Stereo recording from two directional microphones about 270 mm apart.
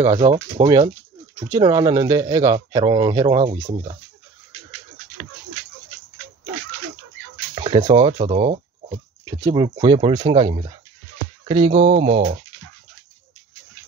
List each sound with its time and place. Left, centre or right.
0.0 s speech: centre
7.5 s speech: centre